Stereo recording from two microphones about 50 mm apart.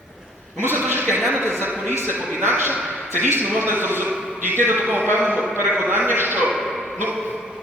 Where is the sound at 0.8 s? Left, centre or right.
Right.